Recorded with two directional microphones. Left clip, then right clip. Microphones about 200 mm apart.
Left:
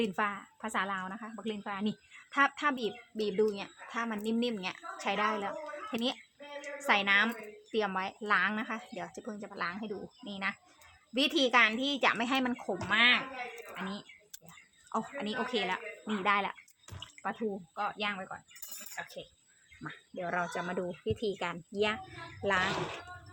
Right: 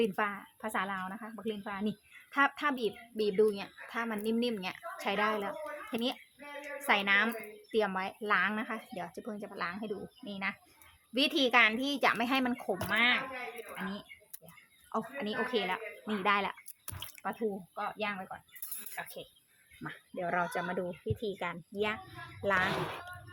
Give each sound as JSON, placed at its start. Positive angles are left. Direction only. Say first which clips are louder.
{"t": 0.0, "sound": "a woman's voice", "louder": "right 1 dB", "side_deg": 0}
{"t": 14.9, "sound": "a woman's voice", "louder": "even", "side_deg": 0}
{"t": 17.7, "sound": "a woman's voice", "louder": "left 5 dB", "side_deg": 0}
{"t": 20.8, "sound": "speech", "louder": "left 3 dB", "side_deg": 20}